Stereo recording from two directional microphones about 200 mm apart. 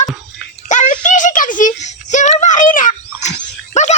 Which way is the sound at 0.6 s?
35° left (ahead or behind).